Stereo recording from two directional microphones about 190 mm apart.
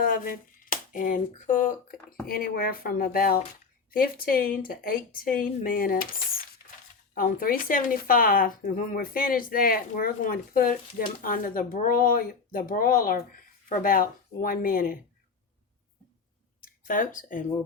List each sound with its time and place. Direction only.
0.0 s speech: 45° left (ahead or behind)
7.1 s speech: 50° left (ahead or behind)
16.6 s a sound: 45° left (ahead or behind)